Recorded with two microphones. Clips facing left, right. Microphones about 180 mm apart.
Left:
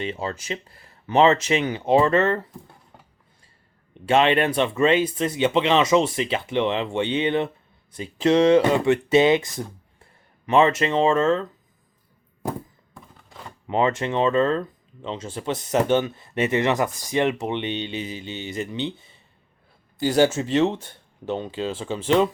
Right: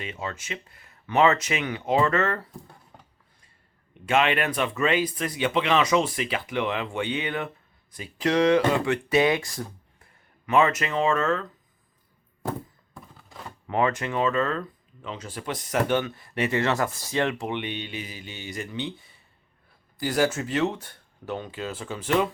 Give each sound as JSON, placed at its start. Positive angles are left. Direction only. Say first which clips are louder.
{"t": 0.0, "sound": "speech", "louder": "left 6 dB", "side_deg": 30}
{"t": 4.0, "sound": "speech", "louder": "left 4 dB", "side_deg": 30}
{"t": 12.9, "sound": "a sound", "louder": "even", "side_deg": 0}
{"t": 13.7, "sound": "speech", "louder": "left 3 dB", "side_deg": 25}